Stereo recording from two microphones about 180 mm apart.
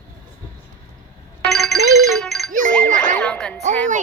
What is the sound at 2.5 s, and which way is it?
Ding, 45° right (ahead or behind).